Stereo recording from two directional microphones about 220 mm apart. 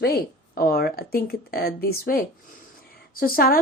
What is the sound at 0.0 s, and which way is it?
A woman's voice, 45° left (ahead or behind).